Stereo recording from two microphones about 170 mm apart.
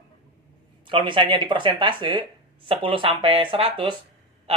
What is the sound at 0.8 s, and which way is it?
Speech, 30° right (ahead or behind).